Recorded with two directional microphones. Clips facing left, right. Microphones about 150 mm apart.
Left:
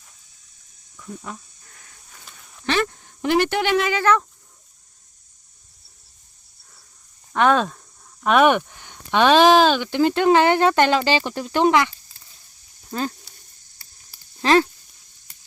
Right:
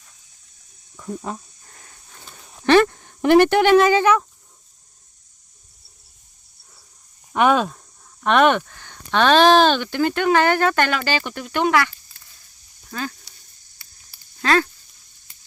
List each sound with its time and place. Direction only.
1.3 s speech: 30° right (ahead or behind)
2.6 s speech: 60° right (ahead or behind)
4.0 s speech: 10° right (ahead or behind)
7.3 s speech: 10° right (ahead or behind)
8.2 s speech: 5° left (ahead or behind)
9.9 s speech: 25° left (ahead or behind)
14.4 s speech: 25° left (ahead or behind)